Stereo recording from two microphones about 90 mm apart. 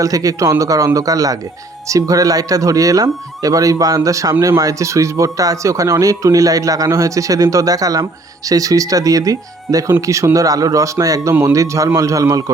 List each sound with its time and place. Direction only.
0.0 s speech: 40° right (ahead or behind)